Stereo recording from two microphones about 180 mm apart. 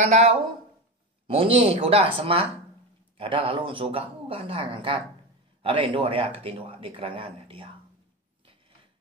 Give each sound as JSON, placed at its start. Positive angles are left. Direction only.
{"t": 0.0, "sound": "speech", "side_deg": -40}